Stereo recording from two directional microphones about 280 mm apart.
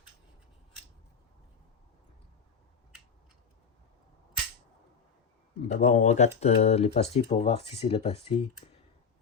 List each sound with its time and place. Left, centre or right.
5.6 s speech: left